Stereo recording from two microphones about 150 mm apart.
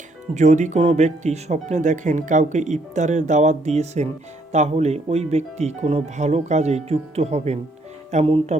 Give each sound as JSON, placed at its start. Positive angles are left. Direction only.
{"t": 0.3, "sound": "speech", "side_deg": -50}